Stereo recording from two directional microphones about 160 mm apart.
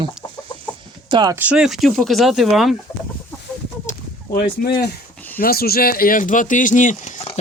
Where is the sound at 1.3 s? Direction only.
10° right (ahead or behind).